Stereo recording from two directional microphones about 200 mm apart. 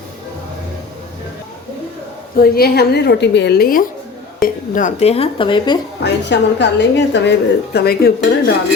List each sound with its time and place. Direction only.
2.4 s a woman's voice: 50° left (ahead or behind); by 5.8 s 25° left (ahead or behind)
6.0 s a woman's voice: 60° left (ahead or behind)